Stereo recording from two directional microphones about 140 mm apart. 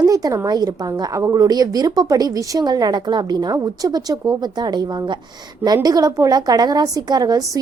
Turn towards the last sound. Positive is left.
turn(degrees=-25)  # may be behind; listen again after turning